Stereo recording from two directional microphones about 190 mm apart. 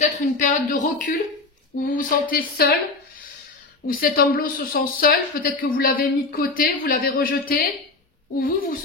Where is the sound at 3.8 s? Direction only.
50° left (ahead or behind).